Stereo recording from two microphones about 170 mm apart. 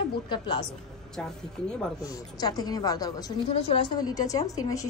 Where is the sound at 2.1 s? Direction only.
20° left (ahead or behind).